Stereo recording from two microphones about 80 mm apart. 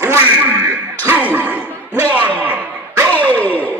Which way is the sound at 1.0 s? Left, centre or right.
Right.